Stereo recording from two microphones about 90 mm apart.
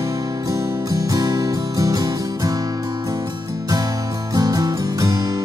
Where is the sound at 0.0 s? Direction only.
45° right (ahead or behind).